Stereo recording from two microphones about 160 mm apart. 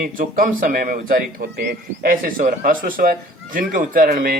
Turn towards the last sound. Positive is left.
turn(degrees=-60)  # may be behind; listen again after turning